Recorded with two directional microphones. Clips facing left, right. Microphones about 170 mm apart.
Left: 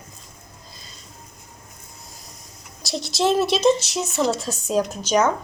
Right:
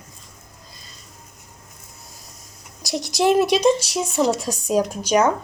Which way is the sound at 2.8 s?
15° right (ahead or behind).